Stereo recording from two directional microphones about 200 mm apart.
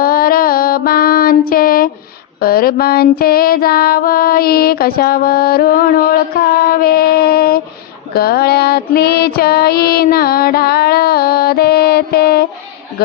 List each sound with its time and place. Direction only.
0.0 s mantra: 45° left (ahead or behind)
6.7 s a sound: 50° left (ahead or behind)
8.1 s music: 50° left (ahead or behind)